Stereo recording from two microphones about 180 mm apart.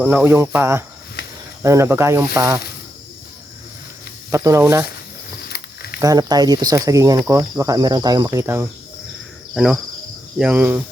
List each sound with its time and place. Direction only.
0.0 s speech: 10° right (ahead or behind)
4.3 s speech: 15° right (ahead or behind)
5.5 s a sound: 60° left (ahead or behind)
6.0 s speech: 20° right (ahead or behind)
10.3 s speech: 5° right (ahead or behind)